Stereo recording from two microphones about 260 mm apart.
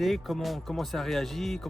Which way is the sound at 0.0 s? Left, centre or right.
Centre.